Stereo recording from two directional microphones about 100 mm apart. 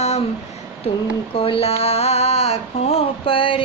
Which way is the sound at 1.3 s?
65° left (ahead or behind).